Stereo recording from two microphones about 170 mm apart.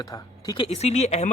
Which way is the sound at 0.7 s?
40° left (ahead or behind).